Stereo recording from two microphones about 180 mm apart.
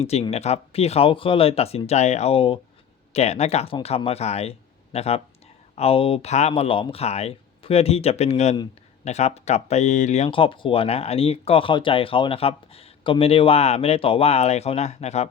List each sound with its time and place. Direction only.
0.1 s speech: 35° left (ahead or behind)
10.2 s speech: 30° left (ahead or behind)